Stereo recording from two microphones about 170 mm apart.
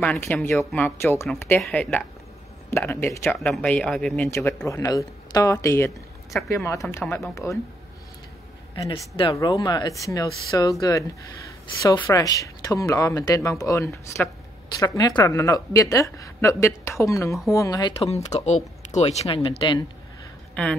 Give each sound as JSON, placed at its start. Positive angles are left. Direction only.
{"t": 0.0, "sound": "a woman's voice", "side_deg": 10}
{"t": 8.7, "sound": "a woman's voice", "side_deg": 20}
{"t": 17.9, "sound": "speech", "side_deg": 35}